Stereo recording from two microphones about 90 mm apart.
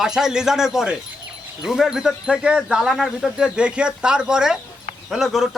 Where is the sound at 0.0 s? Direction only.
5° right (ahead or behind).